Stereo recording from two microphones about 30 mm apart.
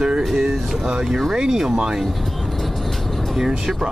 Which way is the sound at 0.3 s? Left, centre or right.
Centre.